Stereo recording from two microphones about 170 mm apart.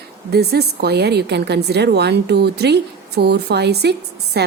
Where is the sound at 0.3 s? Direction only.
70° right (ahead or behind).